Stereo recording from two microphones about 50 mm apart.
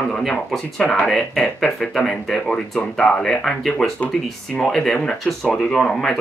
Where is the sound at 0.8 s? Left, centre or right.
Left.